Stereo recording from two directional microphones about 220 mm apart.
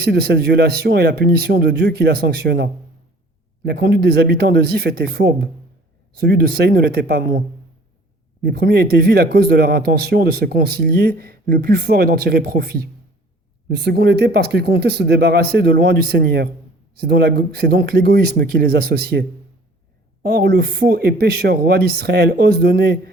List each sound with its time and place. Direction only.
0.0 s speech: 45° right (ahead or behind)
8.4 s speech: 45° right (ahead or behind)
20.2 s speech: 45° right (ahead or behind)